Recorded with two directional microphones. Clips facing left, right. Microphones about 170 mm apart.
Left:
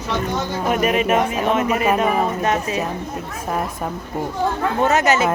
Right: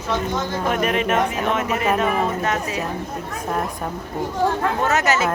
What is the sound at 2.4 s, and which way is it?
Speech, 20° left (ahead or behind).